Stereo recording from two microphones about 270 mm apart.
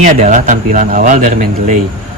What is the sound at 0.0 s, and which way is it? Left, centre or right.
A man's voice, right.